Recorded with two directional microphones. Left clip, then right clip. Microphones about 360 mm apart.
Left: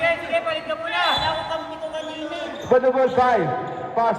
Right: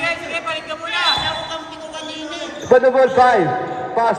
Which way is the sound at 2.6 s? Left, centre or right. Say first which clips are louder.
Right 5 dB; right.